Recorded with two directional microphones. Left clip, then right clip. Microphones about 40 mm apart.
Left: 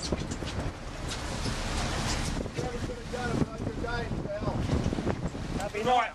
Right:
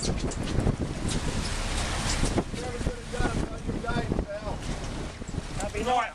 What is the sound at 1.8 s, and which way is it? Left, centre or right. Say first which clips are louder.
Vehicle: right 2 dB; centre.